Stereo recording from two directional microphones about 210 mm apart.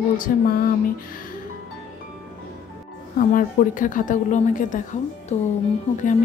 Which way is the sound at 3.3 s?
40° left (ahead or behind).